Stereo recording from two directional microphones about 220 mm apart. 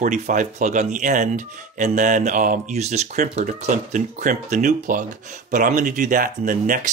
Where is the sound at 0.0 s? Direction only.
35° right (ahead or behind).